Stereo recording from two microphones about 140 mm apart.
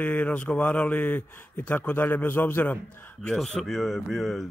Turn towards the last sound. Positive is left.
turn(degrees=0)  # may be behind; listen again after turning